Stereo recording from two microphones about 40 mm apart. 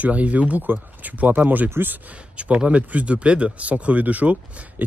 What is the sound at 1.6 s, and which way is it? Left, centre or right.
Speech, right.